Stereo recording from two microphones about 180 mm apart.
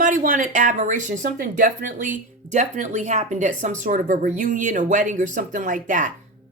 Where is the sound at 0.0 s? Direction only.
45° right (ahead or behind).